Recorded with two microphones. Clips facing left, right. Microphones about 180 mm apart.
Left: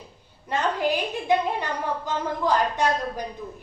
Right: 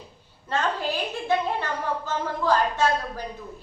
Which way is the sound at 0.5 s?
15° left (ahead or behind).